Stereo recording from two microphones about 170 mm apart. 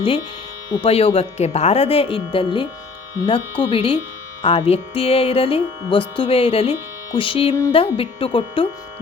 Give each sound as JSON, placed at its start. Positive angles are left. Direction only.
{"t": 0.7, "sound": "speech", "side_deg": 35}